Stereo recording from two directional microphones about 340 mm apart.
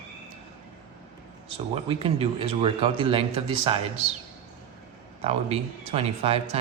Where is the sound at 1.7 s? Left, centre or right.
Centre.